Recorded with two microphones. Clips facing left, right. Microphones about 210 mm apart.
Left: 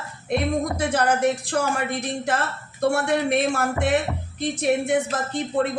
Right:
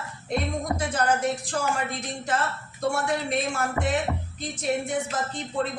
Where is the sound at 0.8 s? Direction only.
60° left (ahead or behind).